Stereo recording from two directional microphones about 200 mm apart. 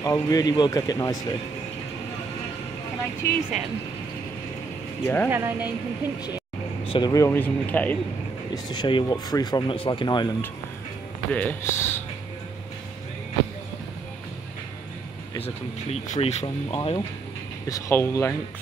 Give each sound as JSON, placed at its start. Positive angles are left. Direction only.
{"t": 0.0, "sound": "speech", "side_deg": 20}
{"t": 5.0, "sound": "speech", "side_deg": 10}
{"t": 5.3, "sound": "a woman's voice", "side_deg": -10}
{"t": 6.8, "sound": "speech", "side_deg": 25}
{"t": 8.6, "sound": "speech", "side_deg": 25}
{"t": 11.3, "sound": "speech", "side_deg": 10}
{"t": 15.3, "sound": "speech", "side_deg": 30}
{"t": 17.6, "sound": "speech", "side_deg": 15}